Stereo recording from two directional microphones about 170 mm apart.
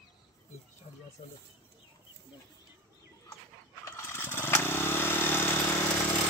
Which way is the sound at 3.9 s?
15° left (ahead or behind).